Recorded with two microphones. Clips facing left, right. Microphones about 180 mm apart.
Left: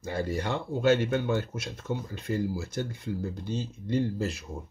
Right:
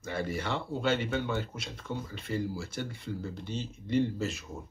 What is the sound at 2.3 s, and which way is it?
Speech, 45° left (ahead or behind).